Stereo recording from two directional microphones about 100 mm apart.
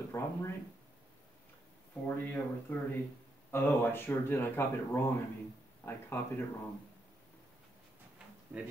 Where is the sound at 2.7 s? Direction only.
15° left (ahead or behind).